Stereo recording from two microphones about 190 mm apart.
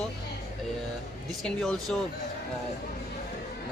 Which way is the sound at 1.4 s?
Centre (ahead or behind).